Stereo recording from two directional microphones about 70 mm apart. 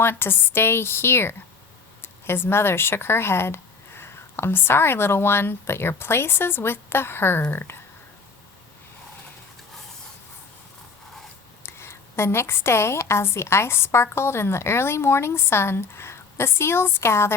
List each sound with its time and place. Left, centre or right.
0.0 s a woman's voice: left
11.6 s a woman's voice: left